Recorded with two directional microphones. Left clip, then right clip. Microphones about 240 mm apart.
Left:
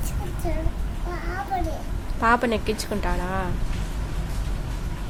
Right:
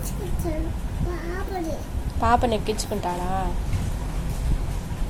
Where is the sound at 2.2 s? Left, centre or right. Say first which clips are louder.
Even; centre.